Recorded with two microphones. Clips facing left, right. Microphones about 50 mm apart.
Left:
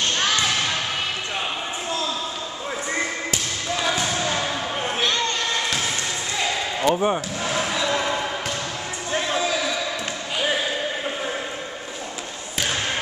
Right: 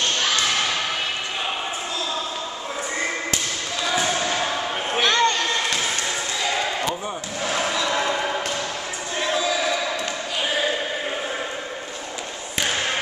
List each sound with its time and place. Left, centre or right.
5.0 s a sound: right
6.9 s speech: left
7.4 s basketball bounce: centre